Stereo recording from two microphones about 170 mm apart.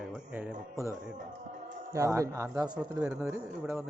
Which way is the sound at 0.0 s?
5° right (ahead or behind).